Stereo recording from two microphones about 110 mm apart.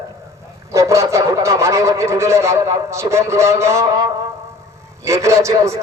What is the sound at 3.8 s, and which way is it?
Music, 40° right (ahead or behind).